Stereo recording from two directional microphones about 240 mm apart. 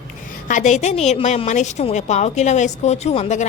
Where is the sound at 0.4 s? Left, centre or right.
Left.